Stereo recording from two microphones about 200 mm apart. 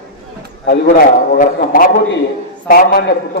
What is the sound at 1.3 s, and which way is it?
A man's voice, 45° left (ahead or behind).